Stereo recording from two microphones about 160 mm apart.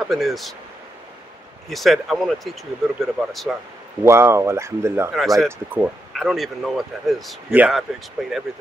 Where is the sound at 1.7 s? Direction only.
Centre (ahead or behind).